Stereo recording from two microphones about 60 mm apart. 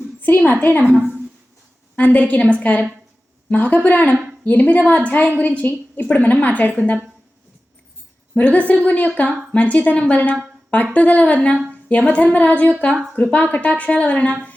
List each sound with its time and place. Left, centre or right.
0.2 s a woman's voice: left
2.0 s a woman's voice: left
8.4 s a woman's voice: left